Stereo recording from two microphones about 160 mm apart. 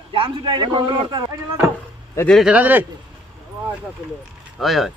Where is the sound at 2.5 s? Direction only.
10° right (ahead or behind).